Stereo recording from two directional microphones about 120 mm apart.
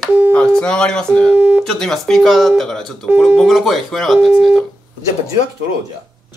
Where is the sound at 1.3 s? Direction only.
15° right (ahead or behind).